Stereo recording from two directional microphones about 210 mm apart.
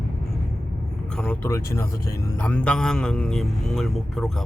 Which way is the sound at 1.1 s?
5° left (ahead or behind).